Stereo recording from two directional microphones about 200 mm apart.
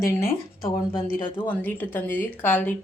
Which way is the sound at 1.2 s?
25° left (ahead or behind).